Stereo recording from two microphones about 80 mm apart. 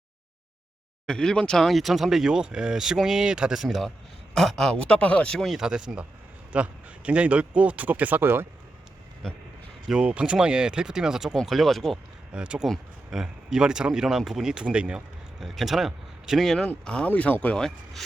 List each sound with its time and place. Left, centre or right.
1.0 s speech: centre
5.4 s speech: centre; by 8.4 s right
9.8 s speech: centre
12.3 s speech: centre
12.6 s speech: centre
15.4 s speech: centre
16.8 s speech: centre